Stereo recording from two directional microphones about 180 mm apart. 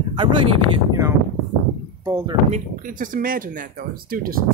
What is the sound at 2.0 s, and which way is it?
Speech, 20° right (ahead or behind).